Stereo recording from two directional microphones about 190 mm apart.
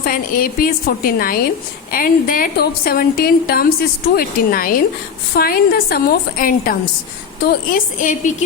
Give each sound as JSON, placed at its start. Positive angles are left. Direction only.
{"t": 0.0, "sound": "a woman's voice", "side_deg": 50}